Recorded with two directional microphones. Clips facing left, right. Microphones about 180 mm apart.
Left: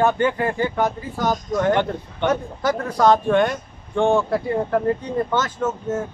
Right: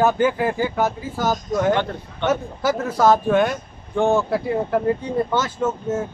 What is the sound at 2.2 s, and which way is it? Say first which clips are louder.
Speech: even; 5° right (ahead or behind).